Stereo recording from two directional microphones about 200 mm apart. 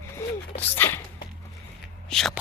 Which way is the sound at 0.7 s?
10° left (ahead or behind).